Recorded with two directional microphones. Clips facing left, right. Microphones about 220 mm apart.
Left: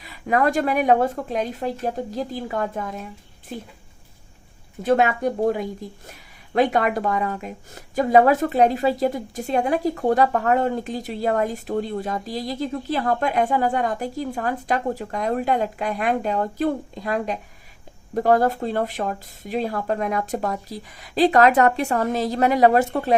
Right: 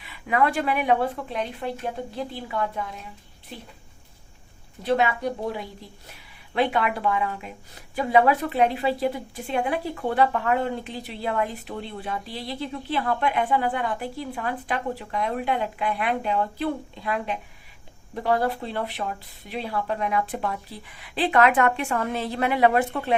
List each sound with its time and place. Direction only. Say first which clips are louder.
0.0 s a woman's voice: left 3 dB; 40° left (ahead or behind)
4.8 s a woman's voice: left 4 dB; 45° left (ahead or behind)